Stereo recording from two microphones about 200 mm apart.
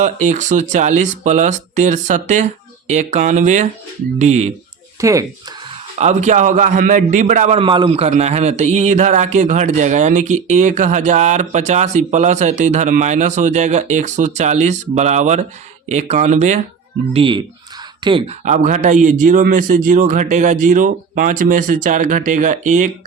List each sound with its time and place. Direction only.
0.0 s speech: 35° right (ahead or behind)
4.9 s speech: 15° right (ahead or behind)
6.0 s speech: 35° right (ahead or behind)
17.2 s speech: 25° right (ahead or behind)
18.4 s speech: 35° right (ahead or behind)